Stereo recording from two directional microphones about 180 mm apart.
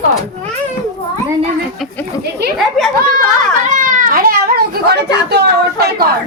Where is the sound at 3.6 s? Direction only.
45° right (ahead or behind); by 6.1 s 65° right (ahead or behind).